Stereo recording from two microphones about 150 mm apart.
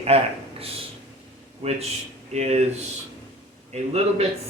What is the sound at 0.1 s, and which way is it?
Speech, 40° right (ahead or behind).